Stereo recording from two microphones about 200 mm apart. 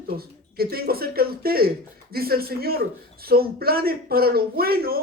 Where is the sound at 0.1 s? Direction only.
50° right (ahead or behind).